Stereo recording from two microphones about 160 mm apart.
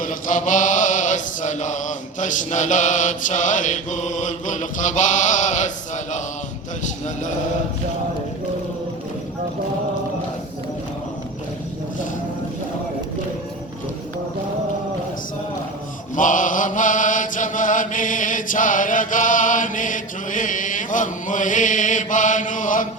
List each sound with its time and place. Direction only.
0.0 s mantra: 55° left (ahead or behind)
16.1 s chant: 55° left (ahead or behind)